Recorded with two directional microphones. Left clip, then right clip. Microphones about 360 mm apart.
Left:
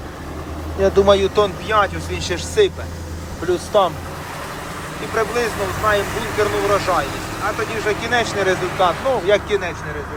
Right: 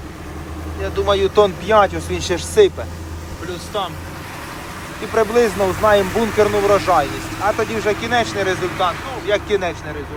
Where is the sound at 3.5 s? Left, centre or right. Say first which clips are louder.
Left 8 dB; centre.